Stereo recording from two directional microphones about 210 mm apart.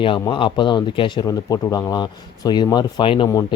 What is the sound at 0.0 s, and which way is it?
Speech, 25° left (ahead or behind).